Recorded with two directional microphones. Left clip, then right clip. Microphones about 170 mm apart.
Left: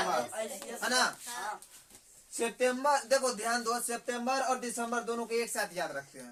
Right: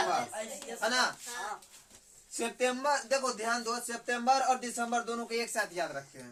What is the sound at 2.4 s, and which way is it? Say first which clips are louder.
Speech: left 1 dB; 15° left (ahead or behind).